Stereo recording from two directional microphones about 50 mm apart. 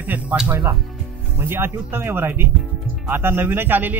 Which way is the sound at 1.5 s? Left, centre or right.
Right.